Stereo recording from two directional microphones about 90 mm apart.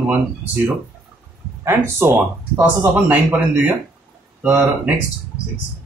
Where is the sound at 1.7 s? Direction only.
30° right (ahead or behind).